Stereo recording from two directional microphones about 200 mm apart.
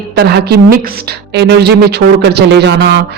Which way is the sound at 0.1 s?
55° right (ahead or behind).